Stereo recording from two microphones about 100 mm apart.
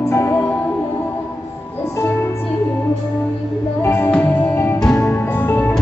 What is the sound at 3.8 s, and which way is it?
Music, 25° left (ahead or behind).